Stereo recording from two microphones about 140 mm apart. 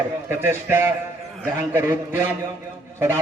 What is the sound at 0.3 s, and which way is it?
A man's voice, 15° right (ahead or behind).